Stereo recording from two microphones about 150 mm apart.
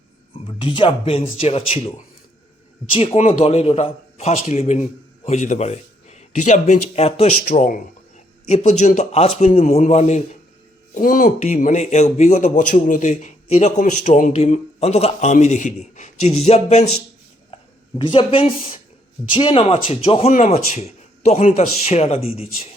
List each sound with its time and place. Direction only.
0.4 s speech: 30° left (ahead or behind)
2.9 s speech: 35° left (ahead or behind)
3.2 s speech: 50° left (ahead or behind)
10.9 s speech: 65° left (ahead or behind); by 16.8 s 45° left (ahead or behind)
17.5 s speech: 35° left (ahead or behind)